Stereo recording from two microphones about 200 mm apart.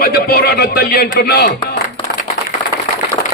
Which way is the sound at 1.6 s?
45° left (ahead or behind).